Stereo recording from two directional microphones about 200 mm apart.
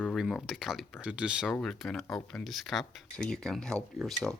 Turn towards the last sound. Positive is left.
turn(degrees=0)  # may be behind; listen again after turning